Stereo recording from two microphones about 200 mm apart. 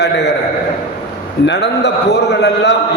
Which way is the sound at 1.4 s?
60° left (ahead or behind).